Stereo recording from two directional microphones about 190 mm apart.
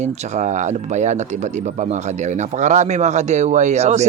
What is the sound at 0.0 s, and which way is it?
Speech, 40° right (ahead or behind).